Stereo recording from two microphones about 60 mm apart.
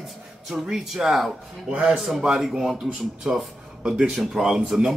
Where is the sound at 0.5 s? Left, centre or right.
Centre.